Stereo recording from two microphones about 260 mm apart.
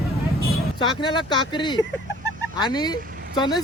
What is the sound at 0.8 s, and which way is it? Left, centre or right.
Speech, centre.